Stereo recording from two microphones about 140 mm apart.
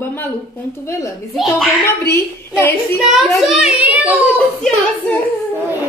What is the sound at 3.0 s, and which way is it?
A child's voice, 5° right (ahead or behind).